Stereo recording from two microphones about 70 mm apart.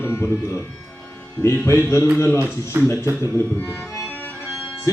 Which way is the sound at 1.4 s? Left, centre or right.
Left.